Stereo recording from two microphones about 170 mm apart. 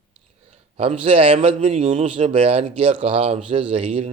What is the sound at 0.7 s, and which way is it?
A man's voice, 35° right (ahead or behind).